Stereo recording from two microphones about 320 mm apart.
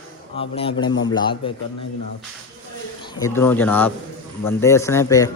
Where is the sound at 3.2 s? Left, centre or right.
Centre.